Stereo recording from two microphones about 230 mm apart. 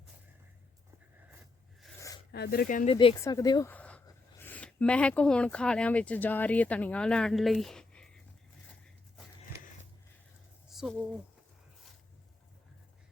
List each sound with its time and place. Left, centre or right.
1.8 s a sound: centre
2.3 s speech: left
2.9 s speech: left; by 8.1 s centre
10.7 s speech: centre